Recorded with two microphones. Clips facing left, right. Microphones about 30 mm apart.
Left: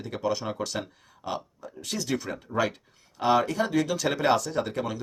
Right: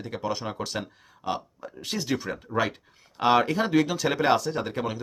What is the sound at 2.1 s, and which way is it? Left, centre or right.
Speech, centre.